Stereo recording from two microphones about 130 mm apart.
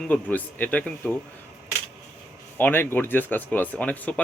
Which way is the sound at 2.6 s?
15° left (ahead or behind).